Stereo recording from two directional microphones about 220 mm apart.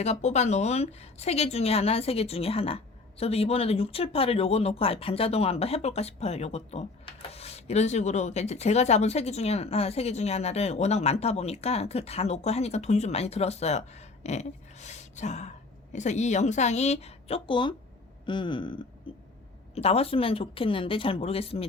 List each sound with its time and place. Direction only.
0.0 s a woman's voice: 30° left (ahead or behind)
19.1 s a sound: 25° left (ahead or behind)
19.7 s a woman's voice: 25° left (ahead or behind)